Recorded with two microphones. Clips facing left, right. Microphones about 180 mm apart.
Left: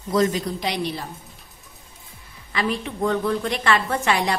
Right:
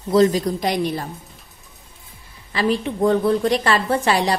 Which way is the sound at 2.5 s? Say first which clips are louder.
Right 5 dB; 35° right (ahead or behind).